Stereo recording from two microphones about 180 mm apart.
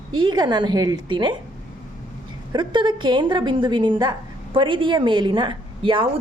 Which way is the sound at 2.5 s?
25° right (ahead or behind).